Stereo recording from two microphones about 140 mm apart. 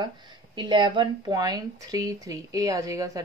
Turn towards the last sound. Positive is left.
turn(degrees=-25)  # may be behind; listen again after turning